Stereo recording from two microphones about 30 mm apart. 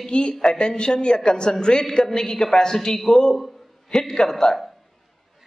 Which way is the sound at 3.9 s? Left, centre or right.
Centre.